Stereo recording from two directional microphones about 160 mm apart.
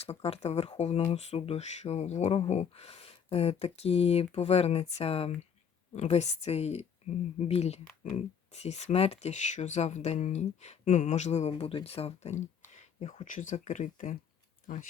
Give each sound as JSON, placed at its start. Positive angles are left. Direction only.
{"t": 0.3, "sound": "speech", "side_deg": 40}